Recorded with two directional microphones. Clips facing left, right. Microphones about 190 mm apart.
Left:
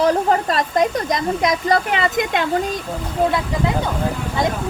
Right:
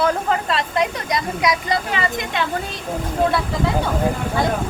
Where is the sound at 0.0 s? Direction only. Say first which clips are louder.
Left 3 dB; 35° left (ahead or behind).